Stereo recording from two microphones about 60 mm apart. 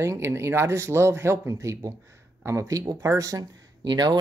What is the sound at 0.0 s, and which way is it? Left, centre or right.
Speech, right.